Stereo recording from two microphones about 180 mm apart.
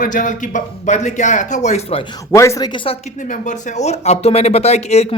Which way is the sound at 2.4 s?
20° left (ahead or behind).